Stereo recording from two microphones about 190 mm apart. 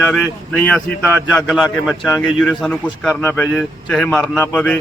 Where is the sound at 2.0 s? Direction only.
15° left (ahead or behind).